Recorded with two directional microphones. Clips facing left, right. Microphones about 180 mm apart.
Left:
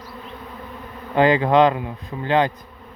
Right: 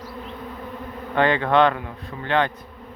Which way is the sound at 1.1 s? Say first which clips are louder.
Left 3 dB; 10° left (ahead or behind).